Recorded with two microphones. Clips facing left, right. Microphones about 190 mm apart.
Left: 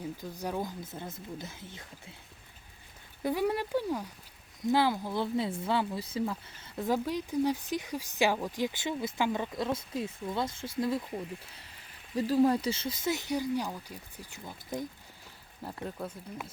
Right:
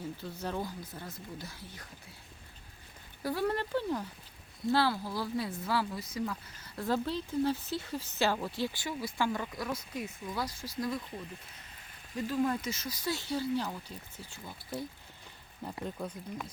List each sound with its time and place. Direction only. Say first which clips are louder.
0.2 s speech: left 2 dB; 15° left (ahead or behind)
0.8 s speech: left 3 dB; 25° left (ahead or behind)
3.2 s speech: left 2 dB; 15° left (ahead or behind)
12.1 s speech: left 6 dB; 35° left (ahead or behind); by 14.8 s 15° left (ahead or behind)
15.8 s speech: even; 5° left (ahead or behind)